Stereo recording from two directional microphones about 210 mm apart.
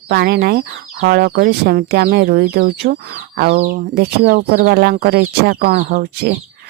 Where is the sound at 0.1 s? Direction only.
50° right (ahead or behind).